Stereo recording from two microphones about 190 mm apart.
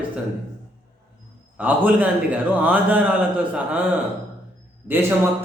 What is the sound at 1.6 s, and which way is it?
A man's voice, 10° right (ahead or behind).